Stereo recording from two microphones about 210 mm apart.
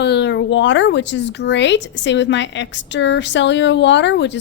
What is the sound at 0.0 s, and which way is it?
A woman's voice, 55° left (ahead or behind).